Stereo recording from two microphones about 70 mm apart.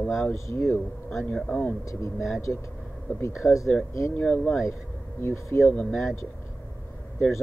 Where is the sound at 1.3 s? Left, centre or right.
Centre.